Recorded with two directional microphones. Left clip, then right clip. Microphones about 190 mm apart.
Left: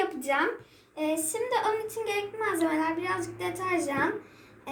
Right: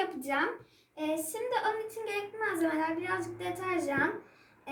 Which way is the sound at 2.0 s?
10° right (ahead or behind).